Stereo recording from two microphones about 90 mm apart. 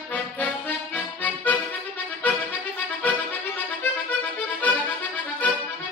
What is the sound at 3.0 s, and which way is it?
Accordion, 20° left (ahead or behind).